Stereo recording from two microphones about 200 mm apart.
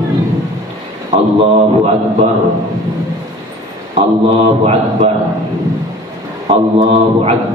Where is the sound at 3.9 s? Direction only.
30° right (ahead or behind).